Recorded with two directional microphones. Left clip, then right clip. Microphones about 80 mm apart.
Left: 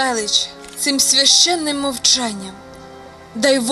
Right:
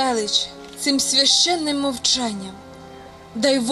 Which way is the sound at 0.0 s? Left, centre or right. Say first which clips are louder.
Left 2 dB; left.